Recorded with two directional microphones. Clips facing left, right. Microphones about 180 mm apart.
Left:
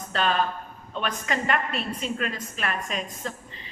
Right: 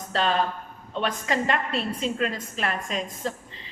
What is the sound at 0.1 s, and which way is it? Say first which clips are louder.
A woman's voice: right 1 dB; 25° right (ahead or behind).